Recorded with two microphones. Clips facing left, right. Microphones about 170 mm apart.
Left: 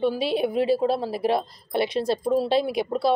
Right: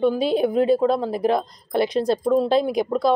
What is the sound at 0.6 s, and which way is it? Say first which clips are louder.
Speech: right 3 dB; 5° left (ahead or behind).